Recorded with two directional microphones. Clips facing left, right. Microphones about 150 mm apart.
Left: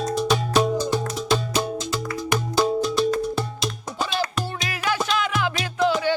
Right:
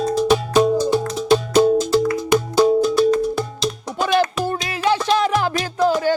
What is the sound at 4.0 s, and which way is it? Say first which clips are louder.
Music: right 8 dB; 55° right (ahead or behind).